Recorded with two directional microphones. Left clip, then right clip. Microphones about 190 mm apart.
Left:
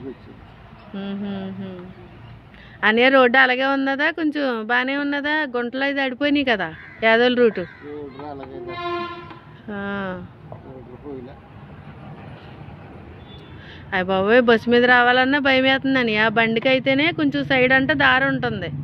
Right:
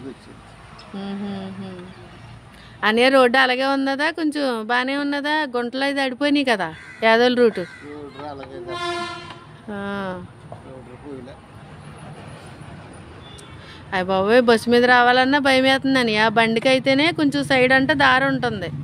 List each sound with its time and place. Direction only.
0.9 s speech: 20° right (ahead or behind)
2.8 s speech: 20° right (ahead or behind)
9.7 s speech: 25° right (ahead or behind)
13.8 s speech: 20° right (ahead or behind)